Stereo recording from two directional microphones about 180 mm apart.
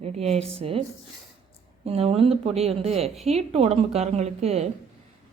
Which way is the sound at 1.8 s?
35° right (ahead or behind).